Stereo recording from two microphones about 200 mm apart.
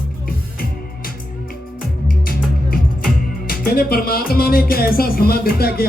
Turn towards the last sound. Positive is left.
turn(degrees=50)  # may be behind; listen again after turning